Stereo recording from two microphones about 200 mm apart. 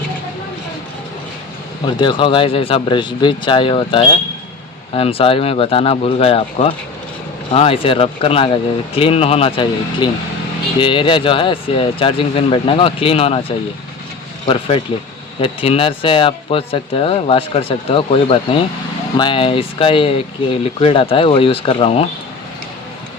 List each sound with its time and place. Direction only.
2.0 s speech: 25° left (ahead or behind)
14.4 s speech: 25° left (ahead or behind)